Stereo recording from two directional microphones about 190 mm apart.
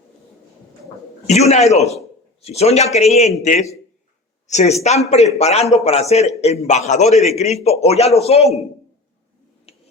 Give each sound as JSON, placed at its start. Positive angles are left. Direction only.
{"t": 1.3, "sound": "a man's voice", "side_deg": 35}
{"t": 9.7, "sound": "finger snapping", "side_deg": 35}